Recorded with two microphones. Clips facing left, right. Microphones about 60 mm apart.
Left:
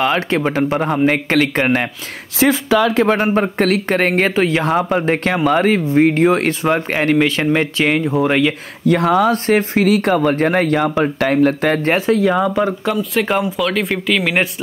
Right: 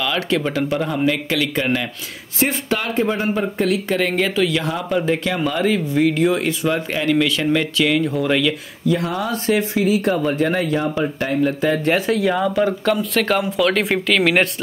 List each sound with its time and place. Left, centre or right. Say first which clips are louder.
0.0 s a man's voice: left 4 dB; left
2.4 s speech: left 7 dB; left
3.2 s a man's voice: left 5 dB; left
8.0 s speech: left 3 dB; left
8.8 s speech: left 7 dB; left
9.5 s speech: left 4 dB; left
9.8 s speech: left 4 dB; left
12.3 s speech: left 2 dB; centre
13.5 s speech: right 1 dB; centre